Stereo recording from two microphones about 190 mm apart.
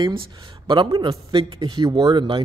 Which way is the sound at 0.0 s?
25° right (ahead or behind).